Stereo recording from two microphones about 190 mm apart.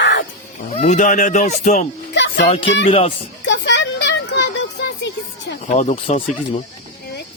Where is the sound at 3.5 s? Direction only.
65° left (ahead or behind).